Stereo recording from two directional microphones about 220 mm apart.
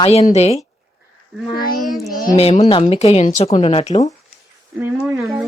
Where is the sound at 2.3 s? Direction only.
25° left (ahead or behind).